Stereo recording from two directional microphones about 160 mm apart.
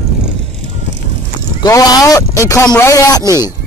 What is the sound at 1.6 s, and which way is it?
A man's voice, 25° left (ahead or behind).